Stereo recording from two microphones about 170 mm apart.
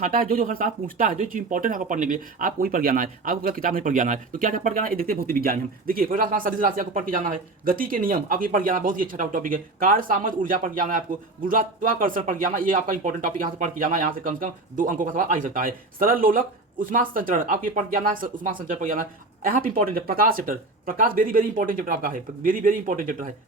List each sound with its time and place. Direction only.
0.0 s speech: 55° right (ahead or behind)